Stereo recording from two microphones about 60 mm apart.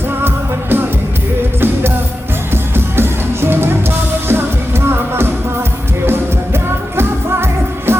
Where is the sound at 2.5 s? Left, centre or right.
Right.